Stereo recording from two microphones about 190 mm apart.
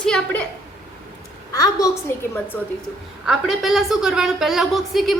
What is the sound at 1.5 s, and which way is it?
Speech, 20° left (ahead or behind).